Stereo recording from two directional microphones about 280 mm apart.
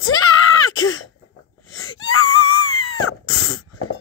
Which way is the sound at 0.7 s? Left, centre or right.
Left.